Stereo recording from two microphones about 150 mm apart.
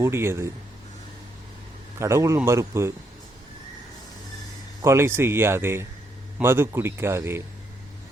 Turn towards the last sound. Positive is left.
turn(degrees=-15)  # may be behind; listen again after turning